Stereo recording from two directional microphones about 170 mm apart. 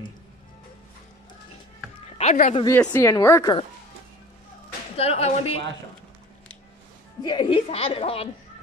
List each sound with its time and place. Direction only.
2.1 s speech: 45° left (ahead or behind)
2.6 s a woman's voice: 20° left (ahead or behind)
4.9 s a woman's voice: 35° left (ahead or behind)
7.2 s a woman's voice: 30° left (ahead or behind)